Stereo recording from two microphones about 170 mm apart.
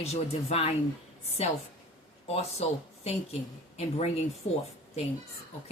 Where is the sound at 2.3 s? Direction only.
35° left (ahead or behind).